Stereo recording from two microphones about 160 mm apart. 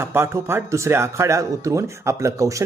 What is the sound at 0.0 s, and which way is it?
Speech, 15° right (ahead or behind).